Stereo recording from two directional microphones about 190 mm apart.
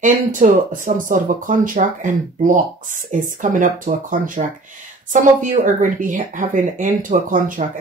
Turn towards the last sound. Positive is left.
turn(degrees=-45)  # may be behind; listen again after turning